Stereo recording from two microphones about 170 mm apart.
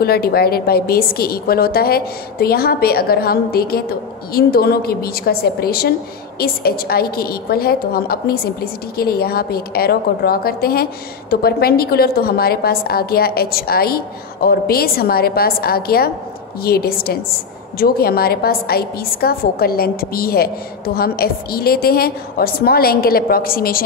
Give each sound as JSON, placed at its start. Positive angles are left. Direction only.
{"t": 0.0, "sound": "a woman's voice", "side_deg": 65}